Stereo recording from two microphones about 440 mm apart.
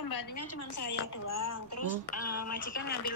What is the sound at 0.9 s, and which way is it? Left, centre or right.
Speech, left.